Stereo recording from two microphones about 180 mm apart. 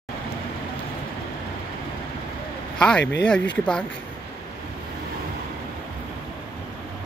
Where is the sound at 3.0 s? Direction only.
75° left (ahead or behind).